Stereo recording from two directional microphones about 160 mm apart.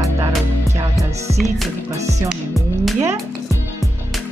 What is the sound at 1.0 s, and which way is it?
Music, 45° right (ahead or behind).